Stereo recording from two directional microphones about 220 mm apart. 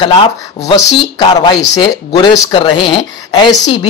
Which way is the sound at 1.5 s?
20° left (ahead or behind).